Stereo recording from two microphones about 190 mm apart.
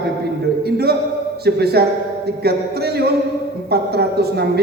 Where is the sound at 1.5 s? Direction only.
55° right (ahead or behind).